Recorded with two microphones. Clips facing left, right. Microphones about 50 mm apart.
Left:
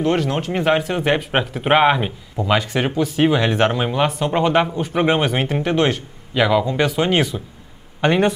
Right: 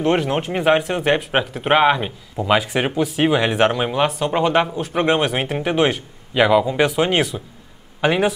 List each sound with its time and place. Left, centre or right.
0.0 s speech: right
0.5 s speech: centre
2.4 s speech: centre